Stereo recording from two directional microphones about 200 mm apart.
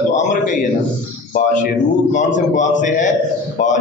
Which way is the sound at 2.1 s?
40° left (ahead or behind).